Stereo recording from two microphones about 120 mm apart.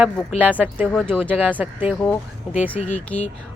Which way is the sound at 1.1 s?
5° left (ahead or behind).